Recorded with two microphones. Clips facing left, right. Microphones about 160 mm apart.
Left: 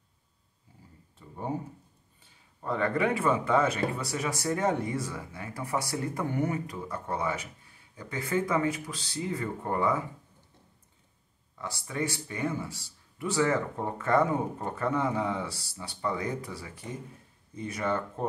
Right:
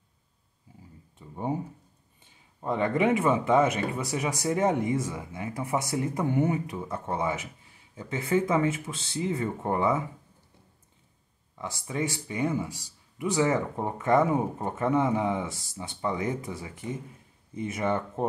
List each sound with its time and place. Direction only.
1.1 s speech: 15° right (ahead or behind)
2.6 s speech: 20° right (ahead or behind)
11.5 s speech: 20° right (ahead or behind)